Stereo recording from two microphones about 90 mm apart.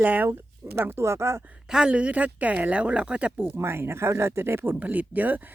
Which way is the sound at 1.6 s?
10° right (ahead or behind).